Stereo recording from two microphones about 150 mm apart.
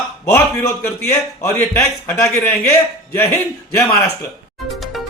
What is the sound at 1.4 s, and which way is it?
Speech, 15° left (ahead or behind).